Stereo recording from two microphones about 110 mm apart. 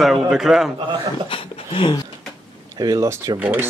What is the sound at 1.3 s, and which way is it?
Speech, 55° left (ahead or behind).